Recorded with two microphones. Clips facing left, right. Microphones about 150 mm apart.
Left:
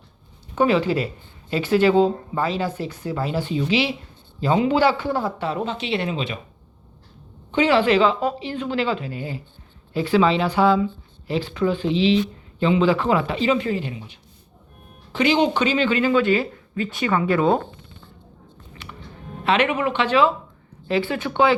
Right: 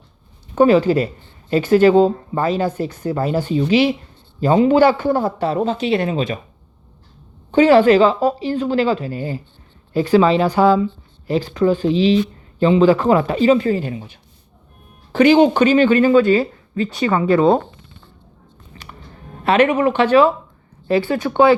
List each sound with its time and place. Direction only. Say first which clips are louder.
0.5 s speech: right 6 dB; 45° right (ahead or behind)
7.5 s speech: right 7 dB; 45° right (ahead or behind)
18.7 s music: right 1 dB; 40° right (ahead or behind)
19.5 s speech: right 6 dB; 45° right (ahead or behind)